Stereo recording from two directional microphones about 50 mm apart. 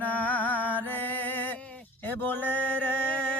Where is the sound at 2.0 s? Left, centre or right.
Left.